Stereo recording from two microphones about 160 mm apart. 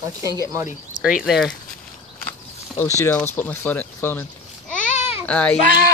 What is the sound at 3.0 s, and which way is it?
Speech, 15° left (ahead or behind).